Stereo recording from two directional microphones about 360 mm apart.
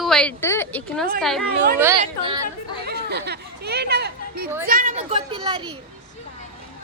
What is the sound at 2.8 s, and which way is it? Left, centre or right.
Chatter, right.